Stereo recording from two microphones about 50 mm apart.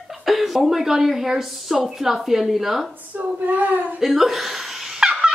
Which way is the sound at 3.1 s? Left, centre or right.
Right.